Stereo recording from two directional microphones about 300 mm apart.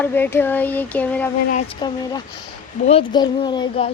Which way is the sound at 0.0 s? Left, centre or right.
Centre.